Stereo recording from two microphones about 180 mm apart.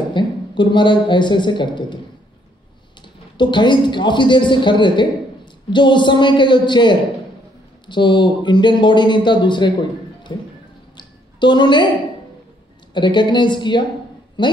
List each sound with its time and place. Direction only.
0.1 s a man's voice: 25° left (ahead or behind)
3.3 s a man's voice: 25° left (ahead or behind)
11.0 s a sound: 25° left (ahead or behind)
12.9 s a man's voice: 25° left (ahead or behind)